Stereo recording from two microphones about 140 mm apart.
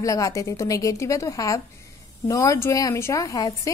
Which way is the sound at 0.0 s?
25° left (ahead or behind).